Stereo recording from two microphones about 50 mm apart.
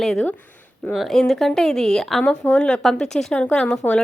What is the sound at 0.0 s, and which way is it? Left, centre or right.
Speech, centre.